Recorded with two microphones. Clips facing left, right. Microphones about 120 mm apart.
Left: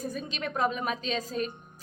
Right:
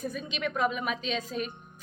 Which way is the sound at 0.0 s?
40° left (ahead or behind).